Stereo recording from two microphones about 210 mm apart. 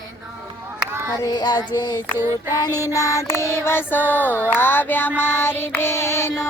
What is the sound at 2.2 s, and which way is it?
Female singing, 10° right (ahead or behind).